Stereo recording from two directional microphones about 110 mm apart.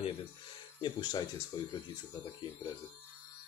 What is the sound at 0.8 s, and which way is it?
Speech, 45° left (ahead or behind).